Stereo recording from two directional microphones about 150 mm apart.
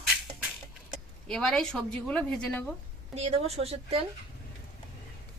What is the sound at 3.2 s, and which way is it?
Speech, 45° right (ahead or behind).